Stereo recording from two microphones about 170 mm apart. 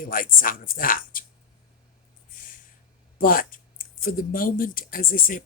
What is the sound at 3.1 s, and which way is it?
Speech, 55° left (ahead or behind).